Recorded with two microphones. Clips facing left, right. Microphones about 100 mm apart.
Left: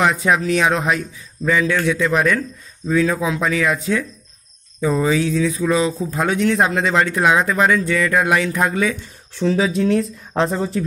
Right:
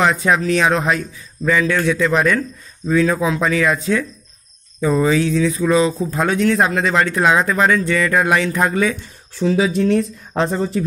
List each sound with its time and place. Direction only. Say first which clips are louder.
0.0 s a man's voice: right 1 dB; 10° left (ahead or behind)
6.3 s a man's voice: right 1 dB; 15° left (ahead or behind); by 10.8 s centre (ahead or behind)